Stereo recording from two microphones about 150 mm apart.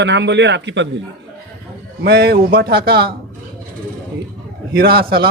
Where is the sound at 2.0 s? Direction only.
90° right.